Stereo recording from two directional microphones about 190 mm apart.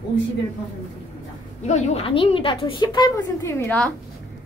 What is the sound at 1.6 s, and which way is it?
A woman's voice, 35° left (ahead or behind).